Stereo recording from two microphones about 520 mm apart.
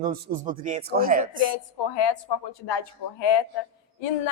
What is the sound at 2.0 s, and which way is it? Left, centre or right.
A woman's voice, left.